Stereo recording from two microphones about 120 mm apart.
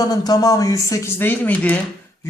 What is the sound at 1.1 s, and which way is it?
Speech, 15° left (ahead or behind).